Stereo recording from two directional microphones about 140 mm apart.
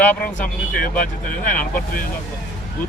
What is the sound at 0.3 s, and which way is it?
Speech, 75° left (ahead or behind).